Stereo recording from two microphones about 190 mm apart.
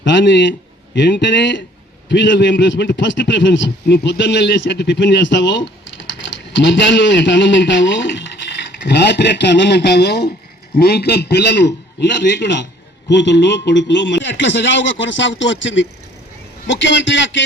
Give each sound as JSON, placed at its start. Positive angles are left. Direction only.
{"t": 0.0, "sound": "a man's voice", "side_deg": 70}